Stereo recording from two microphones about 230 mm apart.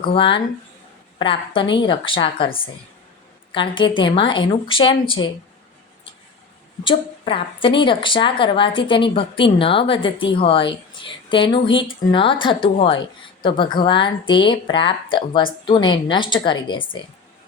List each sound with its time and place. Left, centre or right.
0.0 s a woman's voice: left
3.5 s a woman's voice: left
6.8 s a woman's voice: left